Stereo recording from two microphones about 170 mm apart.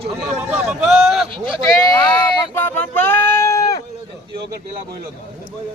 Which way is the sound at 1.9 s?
10° left (ahead or behind).